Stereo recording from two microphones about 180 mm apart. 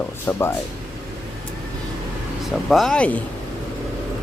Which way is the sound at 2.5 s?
Centre (ahead or behind).